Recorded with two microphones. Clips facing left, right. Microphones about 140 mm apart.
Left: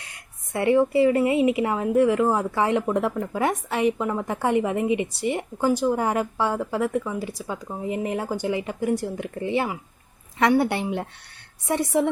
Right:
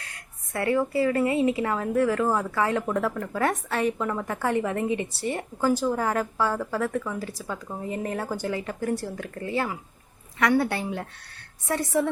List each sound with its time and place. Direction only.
0.0 s speech: 20° left (ahead or behind)